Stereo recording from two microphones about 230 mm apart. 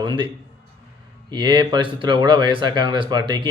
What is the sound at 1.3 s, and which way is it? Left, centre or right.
Speech, centre.